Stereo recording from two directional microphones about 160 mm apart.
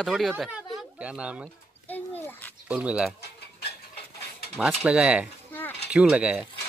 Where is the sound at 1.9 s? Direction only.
10° left (ahead or behind).